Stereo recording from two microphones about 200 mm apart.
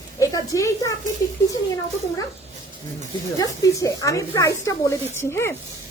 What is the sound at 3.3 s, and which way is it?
Speech, 15° left (ahead or behind).